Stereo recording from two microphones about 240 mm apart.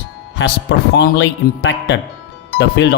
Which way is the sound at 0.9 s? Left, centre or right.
Left.